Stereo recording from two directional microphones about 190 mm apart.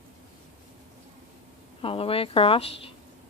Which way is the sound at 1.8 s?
30° left (ahead or behind).